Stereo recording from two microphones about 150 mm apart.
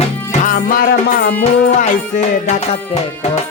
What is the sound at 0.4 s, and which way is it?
Music, 70° left (ahead or behind).